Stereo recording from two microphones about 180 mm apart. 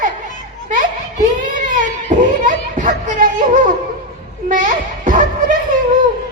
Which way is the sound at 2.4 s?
45° right (ahead or behind).